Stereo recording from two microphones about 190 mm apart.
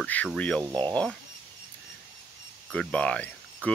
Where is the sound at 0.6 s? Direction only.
20° right (ahead or behind).